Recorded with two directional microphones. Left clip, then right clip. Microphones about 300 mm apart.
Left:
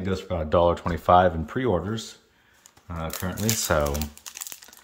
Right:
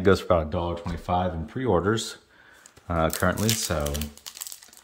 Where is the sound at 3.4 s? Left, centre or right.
Centre.